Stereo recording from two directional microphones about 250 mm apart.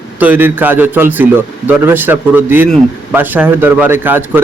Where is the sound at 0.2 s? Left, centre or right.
Centre.